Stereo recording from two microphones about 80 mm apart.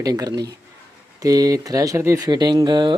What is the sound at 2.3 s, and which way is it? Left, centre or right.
Speech, right.